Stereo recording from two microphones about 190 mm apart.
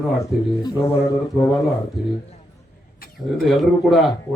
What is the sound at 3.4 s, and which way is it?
Speech, centre (ahead or behind).